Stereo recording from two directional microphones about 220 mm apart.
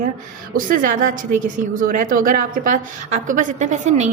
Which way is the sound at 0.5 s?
40° right (ahead or behind).